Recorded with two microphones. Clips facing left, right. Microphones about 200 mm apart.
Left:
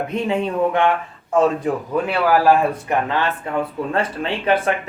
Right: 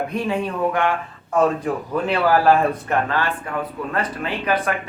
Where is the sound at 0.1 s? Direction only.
20° left (ahead or behind).